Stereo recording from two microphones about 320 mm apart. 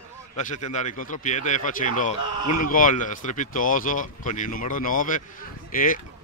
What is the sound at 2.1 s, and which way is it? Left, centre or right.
Speech, left.